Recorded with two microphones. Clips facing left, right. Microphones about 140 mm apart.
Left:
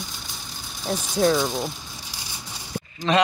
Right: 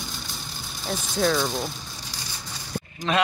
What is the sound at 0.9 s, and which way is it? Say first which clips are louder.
Speech: left 3 dB; centre (ahead or behind).